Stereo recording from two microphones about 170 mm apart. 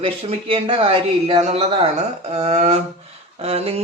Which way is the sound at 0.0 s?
35° right (ahead or behind).